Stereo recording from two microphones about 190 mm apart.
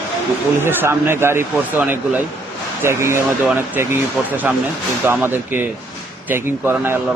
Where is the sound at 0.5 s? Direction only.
10° right (ahead or behind).